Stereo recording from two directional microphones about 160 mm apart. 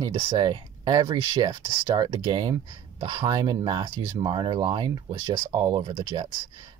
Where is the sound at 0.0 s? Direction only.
30° right (ahead or behind).